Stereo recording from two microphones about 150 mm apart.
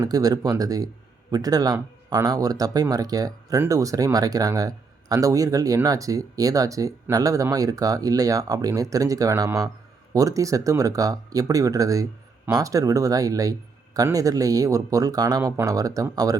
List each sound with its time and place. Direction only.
0.0 s speech: 25° right (ahead or behind)